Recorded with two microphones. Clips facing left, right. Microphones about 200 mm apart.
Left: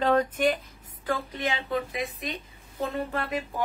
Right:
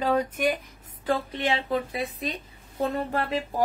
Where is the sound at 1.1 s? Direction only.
30° right (ahead or behind).